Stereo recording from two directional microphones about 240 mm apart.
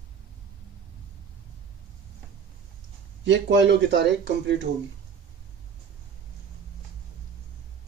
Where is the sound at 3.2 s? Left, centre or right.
Right.